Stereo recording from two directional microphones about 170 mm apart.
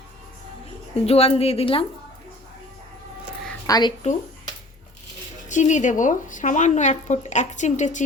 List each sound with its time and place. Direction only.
1.0 s a woman's voice: 35° left (ahead or behind)
3.7 s speech: 25° left (ahead or behind)
5.5 s speech: 45° left (ahead or behind)